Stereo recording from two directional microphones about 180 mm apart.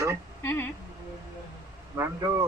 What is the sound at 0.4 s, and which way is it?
Music, 10° left (ahead or behind).